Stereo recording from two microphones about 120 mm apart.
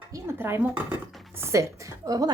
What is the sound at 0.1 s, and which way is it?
Speech, 20° right (ahead or behind).